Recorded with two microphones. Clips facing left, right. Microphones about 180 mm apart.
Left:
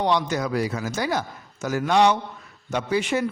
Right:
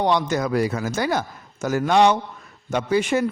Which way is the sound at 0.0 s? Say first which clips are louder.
Right 2 dB; 50° right (ahead or behind).